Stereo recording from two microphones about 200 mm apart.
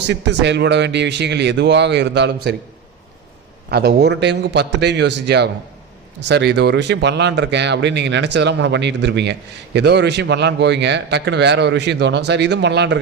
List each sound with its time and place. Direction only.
0.1 s a man's voice: 60° right (ahead or behind)
3.7 s a man's voice: 55° right (ahead or behind)